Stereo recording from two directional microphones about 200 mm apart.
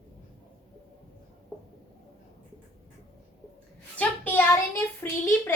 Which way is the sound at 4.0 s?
10° left (ahead or behind).